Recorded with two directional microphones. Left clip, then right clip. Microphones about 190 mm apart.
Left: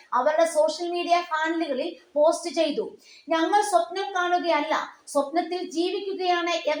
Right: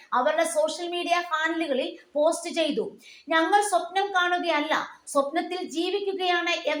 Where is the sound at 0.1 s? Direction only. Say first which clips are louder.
Left 2 dB; 30° right (ahead or behind).